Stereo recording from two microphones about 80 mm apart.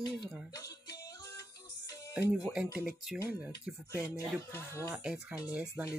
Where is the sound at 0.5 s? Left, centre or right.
Left.